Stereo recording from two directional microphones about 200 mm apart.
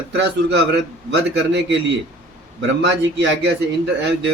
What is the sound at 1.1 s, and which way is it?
A man's voice, 60° right (ahead or behind).